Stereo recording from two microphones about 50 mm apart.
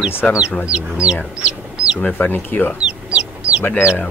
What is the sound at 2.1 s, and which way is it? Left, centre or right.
Speech, left.